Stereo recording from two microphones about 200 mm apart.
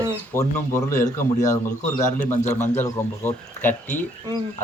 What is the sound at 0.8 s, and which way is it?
A man's voice, 40° left (ahead or behind).